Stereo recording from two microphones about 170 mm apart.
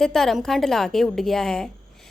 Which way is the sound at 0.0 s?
5° left (ahead or behind).